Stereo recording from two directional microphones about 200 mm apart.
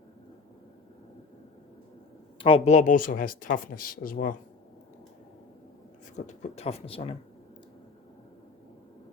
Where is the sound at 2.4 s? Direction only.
25° left (ahead or behind); by 4.3 s 45° left (ahead or behind).